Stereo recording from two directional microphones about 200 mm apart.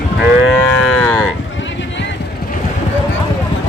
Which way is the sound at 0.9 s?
10° left (ahead or behind).